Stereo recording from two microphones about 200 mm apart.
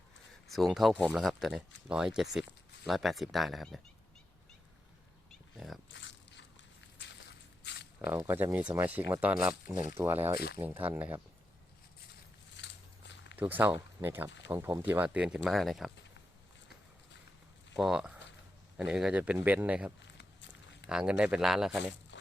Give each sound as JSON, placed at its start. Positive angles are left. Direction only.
{"t": 0.4, "sound": "speech", "side_deg": 0}
{"t": 5.5, "sound": "speech", "side_deg": 0}
{"t": 5.9, "sound": "a sound", "side_deg": 65}
{"t": 8.0, "sound": "speech", "side_deg": -10}
{"t": 12.6, "sound": "biting", "side_deg": 60}
{"t": 13.3, "sound": "speech", "side_deg": -10}
{"t": 17.7, "sound": "speech", "side_deg": 0}